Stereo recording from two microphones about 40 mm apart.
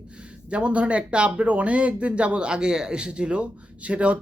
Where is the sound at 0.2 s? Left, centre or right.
Right.